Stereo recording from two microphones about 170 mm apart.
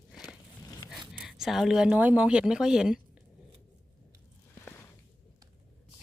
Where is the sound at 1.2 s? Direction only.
Centre (ahead or behind).